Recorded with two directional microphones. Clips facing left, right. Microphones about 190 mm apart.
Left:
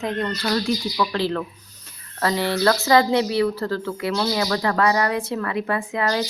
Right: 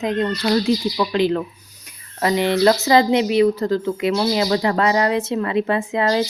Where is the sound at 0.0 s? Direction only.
20° right (ahead or behind).